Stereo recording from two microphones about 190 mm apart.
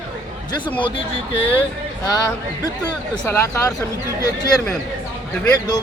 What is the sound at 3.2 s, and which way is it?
Speech, 15° left (ahead or behind).